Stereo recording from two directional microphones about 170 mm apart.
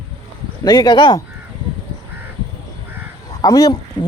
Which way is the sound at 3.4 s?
20° left (ahead or behind).